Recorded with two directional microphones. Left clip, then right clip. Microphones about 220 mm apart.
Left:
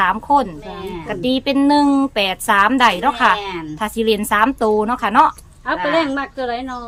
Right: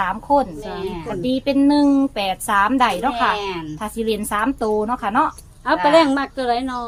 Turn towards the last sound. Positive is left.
turn(degrees=-40)  # may be behind; listen again after turning